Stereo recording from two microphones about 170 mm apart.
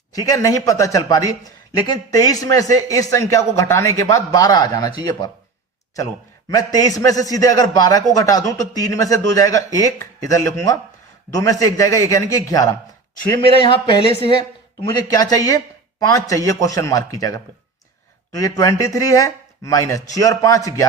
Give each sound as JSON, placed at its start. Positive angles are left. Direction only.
{"t": 0.1, "sound": "speech", "side_deg": 20}
{"t": 6.5, "sound": "speech", "side_deg": 20}
{"t": 13.3, "sound": "speech", "side_deg": 30}